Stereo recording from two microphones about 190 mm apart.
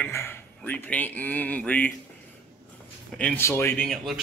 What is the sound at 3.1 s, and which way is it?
A man's voice, 10° left (ahead or behind).